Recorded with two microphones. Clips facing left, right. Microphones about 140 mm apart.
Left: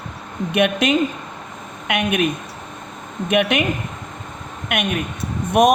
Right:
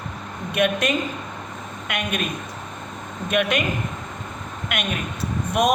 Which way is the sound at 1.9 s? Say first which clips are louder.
Left 7 dB; 65° left (ahead or behind).